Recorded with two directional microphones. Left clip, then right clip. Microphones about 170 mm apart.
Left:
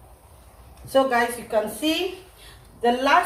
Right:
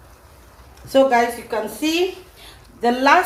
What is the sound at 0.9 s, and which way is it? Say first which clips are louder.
A woman's voice: right 5 dB; 35° right (ahead or behind).